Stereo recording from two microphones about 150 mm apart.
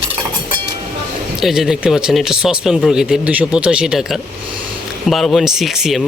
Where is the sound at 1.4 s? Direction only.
Centre (ahead or behind).